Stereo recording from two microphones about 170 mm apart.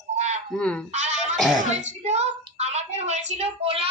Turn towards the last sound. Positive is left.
turn(degrees=-35)  # may be behind; listen again after turning